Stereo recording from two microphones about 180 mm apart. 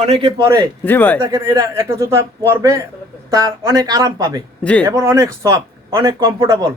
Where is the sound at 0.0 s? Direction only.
30° right (ahead or behind).